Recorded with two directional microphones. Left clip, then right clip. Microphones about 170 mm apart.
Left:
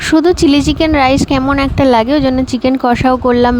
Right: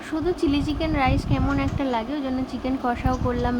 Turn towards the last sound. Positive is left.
turn(degrees=60)  # may be behind; listen again after turning